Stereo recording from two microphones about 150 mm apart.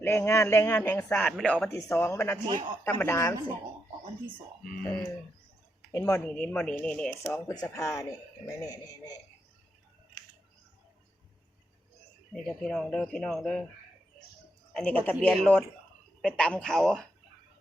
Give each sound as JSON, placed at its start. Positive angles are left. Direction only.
{"t": 0.0, "sound": "speech", "side_deg": 15}
{"t": 1.4, "sound": "speech", "side_deg": 5}
{"t": 1.7, "sound": "speech", "side_deg": 20}
{"t": 4.8, "sound": "speech", "side_deg": 5}
{"t": 5.9, "sound": "speech", "side_deg": 20}
{"t": 7.3, "sound": "speech", "side_deg": 25}
{"t": 12.3, "sound": "speech", "side_deg": 5}
{"t": 14.7, "sound": "speech", "side_deg": 10}